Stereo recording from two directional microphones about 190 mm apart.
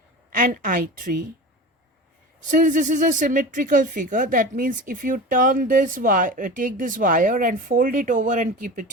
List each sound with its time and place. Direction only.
0.3 s a woman's voice: 45° right (ahead or behind)
2.5 s speech: 45° right (ahead or behind)